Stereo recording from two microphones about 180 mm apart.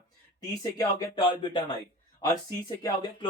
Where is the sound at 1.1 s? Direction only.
25° left (ahead or behind).